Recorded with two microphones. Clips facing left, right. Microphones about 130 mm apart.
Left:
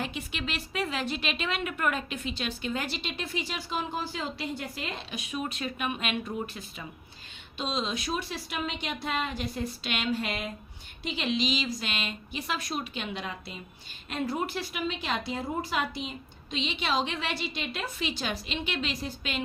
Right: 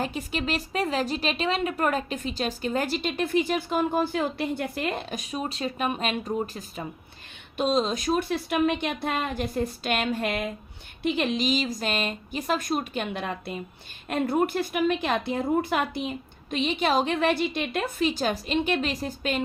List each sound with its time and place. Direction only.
0.0 s a woman's voice: 40° right (ahead or behind)